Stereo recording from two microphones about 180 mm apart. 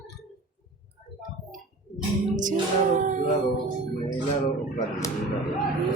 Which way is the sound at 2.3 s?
45° right (ahead or behind).